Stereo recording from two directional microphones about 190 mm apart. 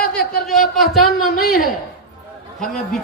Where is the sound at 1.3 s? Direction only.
50° left (ahead or behind).